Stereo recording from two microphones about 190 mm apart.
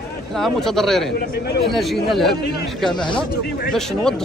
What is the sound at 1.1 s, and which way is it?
Speech, 60° left (ahead or behind).